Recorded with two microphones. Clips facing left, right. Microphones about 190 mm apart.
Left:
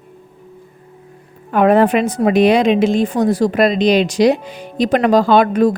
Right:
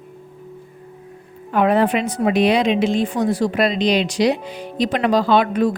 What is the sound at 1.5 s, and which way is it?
A woman's voice, 50° left (ahead or behind).